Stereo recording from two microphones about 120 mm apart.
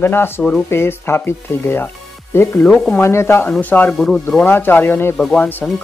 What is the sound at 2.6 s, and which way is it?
Speech, 5° left (ahead or behind).